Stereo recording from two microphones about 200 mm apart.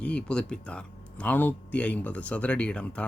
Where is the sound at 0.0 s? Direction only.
5° left (ahead or behind).